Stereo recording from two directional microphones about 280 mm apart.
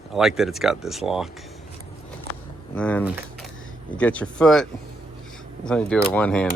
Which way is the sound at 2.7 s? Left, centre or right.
Centre.